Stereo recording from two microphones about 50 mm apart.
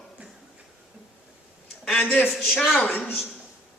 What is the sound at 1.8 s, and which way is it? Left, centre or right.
Speech, centre.